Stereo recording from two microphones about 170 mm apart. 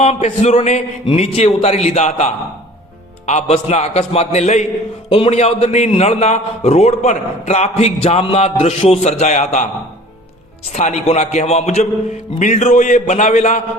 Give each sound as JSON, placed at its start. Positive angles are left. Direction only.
{"t": 0.0, "sound": "a man's voice", "side_deg": 40}
{"t": 10.7, "sound": "a man's voice", "side_deg": 40}